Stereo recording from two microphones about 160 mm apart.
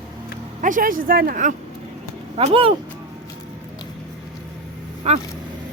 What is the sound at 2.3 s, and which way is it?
Speech, 40° right (ahead or behind).